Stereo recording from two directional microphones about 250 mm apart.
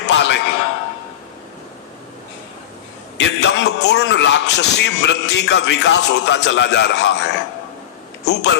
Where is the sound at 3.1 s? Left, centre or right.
Left.